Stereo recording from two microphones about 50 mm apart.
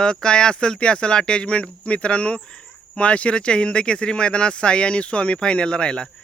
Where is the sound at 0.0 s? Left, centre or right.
Centre.